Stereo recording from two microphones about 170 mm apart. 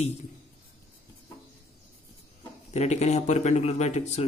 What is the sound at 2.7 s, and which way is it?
Speech, 40° left (ahead or behind).